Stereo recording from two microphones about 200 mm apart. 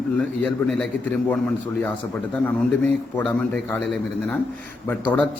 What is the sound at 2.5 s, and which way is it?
Speech, 5° left (ahead or behind).